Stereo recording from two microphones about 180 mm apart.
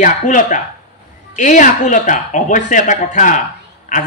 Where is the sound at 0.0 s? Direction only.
45° left (ahead or behind).